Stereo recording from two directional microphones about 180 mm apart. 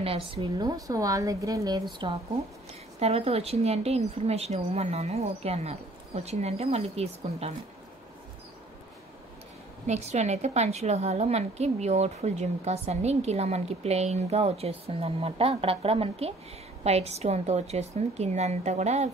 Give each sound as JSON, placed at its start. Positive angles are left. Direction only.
{"t": 0.0, "sound": "a woman's voice", "side_deg": -30}
{"t": 9.8, "sound": "a woman's voice", "side_deg": -40}